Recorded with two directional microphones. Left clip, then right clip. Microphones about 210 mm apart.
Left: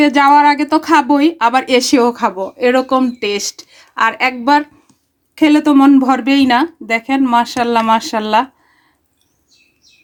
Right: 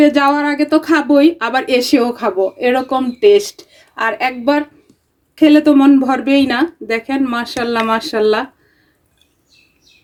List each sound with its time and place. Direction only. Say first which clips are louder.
0.0 s a woman's voice: left 3 dB; 35° left (ahead or behind)